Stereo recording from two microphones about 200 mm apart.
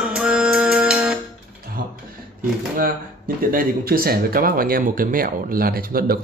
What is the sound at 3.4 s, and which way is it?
Speech, 45° right (ahead or behind).